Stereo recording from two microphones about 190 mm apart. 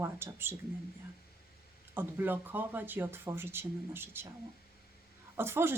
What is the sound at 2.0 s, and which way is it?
Speech, 10° right (ahead or behind).